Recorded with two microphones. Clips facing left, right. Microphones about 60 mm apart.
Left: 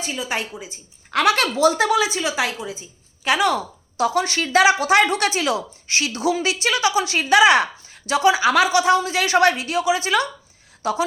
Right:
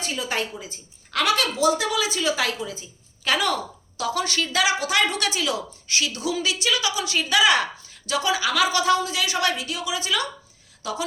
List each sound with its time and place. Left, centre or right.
0.0 s a woman's voice: centre
1.1 s a woman's voice: left